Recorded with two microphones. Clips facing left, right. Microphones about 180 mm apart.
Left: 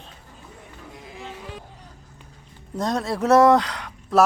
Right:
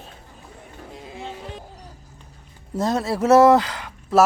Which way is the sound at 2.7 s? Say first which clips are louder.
Right 2 dB; 5° right (ahead or behind).